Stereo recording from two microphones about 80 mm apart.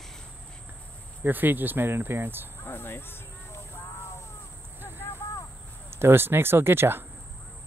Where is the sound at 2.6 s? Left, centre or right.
Left.